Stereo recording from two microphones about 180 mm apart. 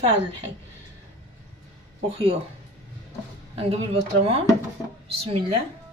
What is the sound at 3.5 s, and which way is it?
Speech, 35° right (ahead or behind).